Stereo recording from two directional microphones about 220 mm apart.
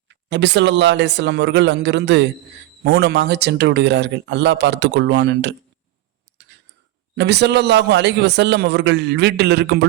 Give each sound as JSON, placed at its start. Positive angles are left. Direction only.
{"t": 0.1, "sound": "speech", "side_deg": -55}
{"t": 7.2, "sound": "speech", "side_deg": -50}